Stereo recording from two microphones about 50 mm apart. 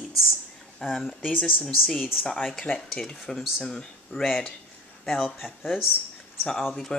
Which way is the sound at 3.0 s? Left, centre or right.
Centre.